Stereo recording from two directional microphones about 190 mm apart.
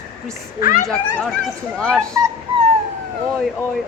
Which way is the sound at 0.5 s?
45° left (ahead or behind).